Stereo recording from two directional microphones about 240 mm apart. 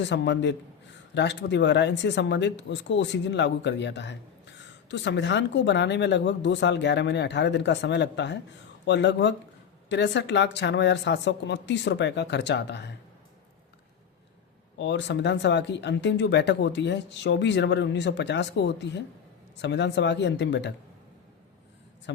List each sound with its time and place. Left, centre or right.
0.0 s speech: left
14.8 s speech: left